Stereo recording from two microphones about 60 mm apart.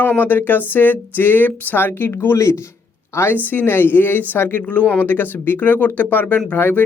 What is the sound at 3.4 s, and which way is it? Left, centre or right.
Speech, left.